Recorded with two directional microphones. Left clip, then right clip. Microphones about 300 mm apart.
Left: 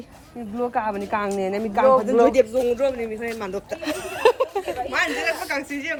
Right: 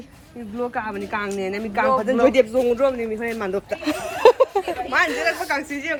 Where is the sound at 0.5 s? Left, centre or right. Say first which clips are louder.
Left 2 dB; left.